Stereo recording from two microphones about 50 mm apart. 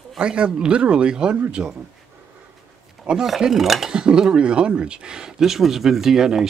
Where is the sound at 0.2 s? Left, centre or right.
Centre.